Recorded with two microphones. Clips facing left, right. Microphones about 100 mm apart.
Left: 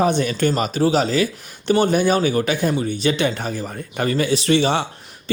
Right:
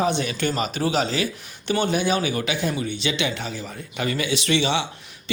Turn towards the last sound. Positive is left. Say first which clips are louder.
# left 4 dB
turn(degrees=45)  # may be behind; listen again after turning